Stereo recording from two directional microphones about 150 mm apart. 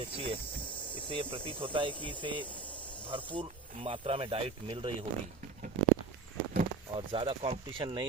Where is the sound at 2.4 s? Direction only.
10° left (ahead or behind).